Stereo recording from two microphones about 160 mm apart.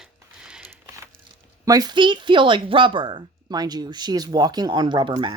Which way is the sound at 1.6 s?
25° right (ahead or behind).